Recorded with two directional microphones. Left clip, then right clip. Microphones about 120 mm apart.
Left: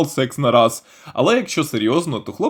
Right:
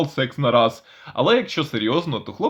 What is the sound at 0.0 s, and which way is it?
Speech, 60° left (ahead or behind).